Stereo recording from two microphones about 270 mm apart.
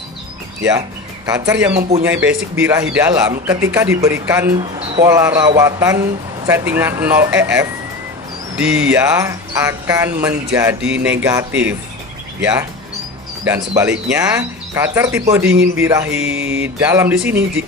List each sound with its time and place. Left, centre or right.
0.7 s speech: centre
1.8 s speech: right
2.0 s speech: centre
13.7 s speech: centre
16.2 s music: centre